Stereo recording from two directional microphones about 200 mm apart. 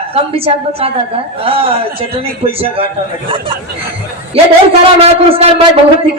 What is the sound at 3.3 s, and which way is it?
Speech, 25° right (ahead or behind).